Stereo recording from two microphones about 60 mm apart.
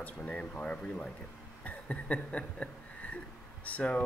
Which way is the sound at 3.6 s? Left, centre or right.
Left.